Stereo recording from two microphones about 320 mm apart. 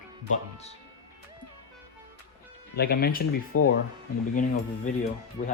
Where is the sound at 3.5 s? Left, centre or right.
Left.